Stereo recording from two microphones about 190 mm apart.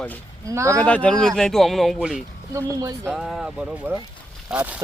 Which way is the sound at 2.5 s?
15° right (ahead or behind).